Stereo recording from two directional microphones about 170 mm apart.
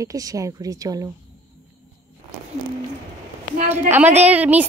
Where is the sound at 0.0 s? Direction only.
20° right (ahead or behind).